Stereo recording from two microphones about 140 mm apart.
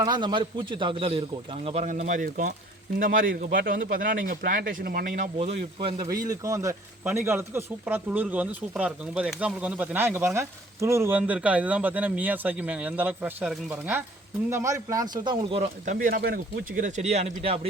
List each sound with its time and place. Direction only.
0.0 s a man's voice: 30° right (ahead or behind)
1.8 s speech: 65° right (ahead or behind)
5.4 s speech: 50° right (ahead or behind)
6.0 s speech: 25° right (ahead or behind)
11.2 s speech: 10° right (ahead or behind)
14.5 s speech: 20° right (ahead or behind); by 15.7 s 40° right (ahead or behind)
15.9 s speech: 80° right; by 17.7 s 45° right (ahead or behind)